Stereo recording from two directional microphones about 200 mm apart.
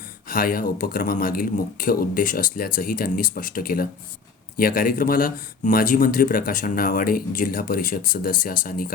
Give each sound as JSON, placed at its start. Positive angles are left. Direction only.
{"t": 0.3, "sound": "speech", "side_deg": 45}